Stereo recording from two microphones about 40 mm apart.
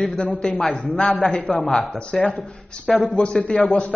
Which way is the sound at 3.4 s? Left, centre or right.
Left.